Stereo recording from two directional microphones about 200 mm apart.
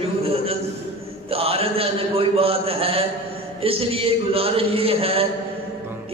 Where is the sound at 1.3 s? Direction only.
30° right (ahead or behind).